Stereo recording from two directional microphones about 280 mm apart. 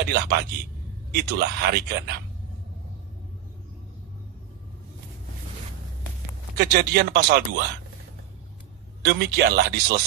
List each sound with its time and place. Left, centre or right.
0.1 s speech: right
6.6 s speech: right
9.0 s speech: right